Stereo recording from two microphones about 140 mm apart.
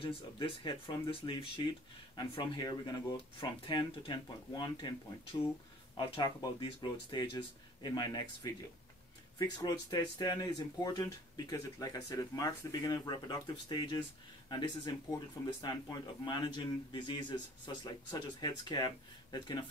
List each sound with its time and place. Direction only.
0.0 s speech: 40° left (ahead or behind)
5.9 s speech: 30° left (ahead or behind)